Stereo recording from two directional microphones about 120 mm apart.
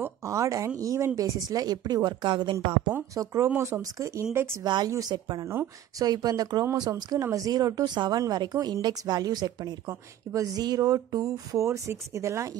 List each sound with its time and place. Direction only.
0.0 s speech: 25° right (ahead or behind); by 2.5 s 40° right (ahead or behind)
3.4 s speech: 20° right (ahead or behind)
4.6 s speech: 35° right (ahead or behind)